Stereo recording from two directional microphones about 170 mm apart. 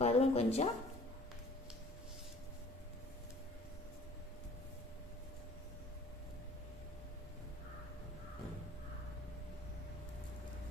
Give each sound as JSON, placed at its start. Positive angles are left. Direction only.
{"t": 0.0, "sound": "speech", "side_deg": 40}